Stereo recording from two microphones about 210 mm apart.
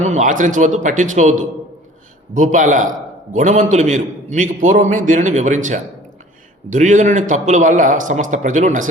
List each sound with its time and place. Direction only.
0.0 s a man's voice: 35° right (ahead or behind)